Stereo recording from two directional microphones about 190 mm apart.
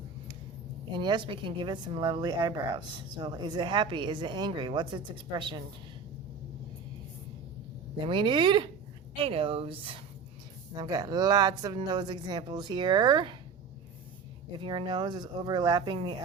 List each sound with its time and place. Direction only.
0.9 s speech: 25° right (ahead or behind)
7.9 s speech: 25° right (ahead or behind)
14.6 s speech: 25° right (ahead or behind)